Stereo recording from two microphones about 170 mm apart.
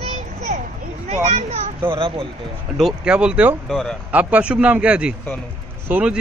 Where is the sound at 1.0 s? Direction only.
40° right (ahead or behind).